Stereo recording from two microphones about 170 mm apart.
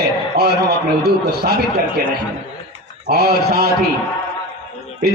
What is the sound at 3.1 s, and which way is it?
Speech, 70° right (ahead or behind).